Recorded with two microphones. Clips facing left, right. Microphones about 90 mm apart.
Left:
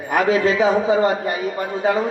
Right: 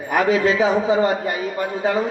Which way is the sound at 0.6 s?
15° left (ahead or behind).